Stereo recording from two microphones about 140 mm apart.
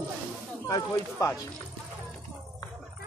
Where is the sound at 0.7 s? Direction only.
25° left (ahead or behind).